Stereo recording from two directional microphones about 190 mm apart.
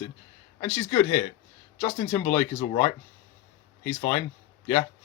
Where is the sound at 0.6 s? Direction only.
20° left (ahead or behind).